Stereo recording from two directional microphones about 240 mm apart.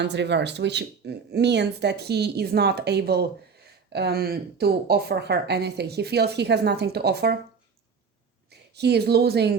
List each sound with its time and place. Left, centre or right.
0.0 s speech: right
8.4 s a woman's voice: right